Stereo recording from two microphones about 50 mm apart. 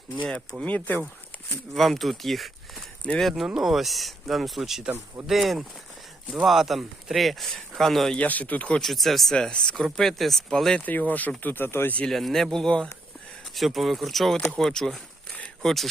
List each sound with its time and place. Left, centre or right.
0.6 s speech: left
1.5 s speech: centre
3.4 s speech: centre
8.1 s speech: left
8.8 s speech: centre
9.3 s speech: centre
10.8 s speech: left
11.4 s speech: left
12.0 s speech: centre
13.5 s speech: centre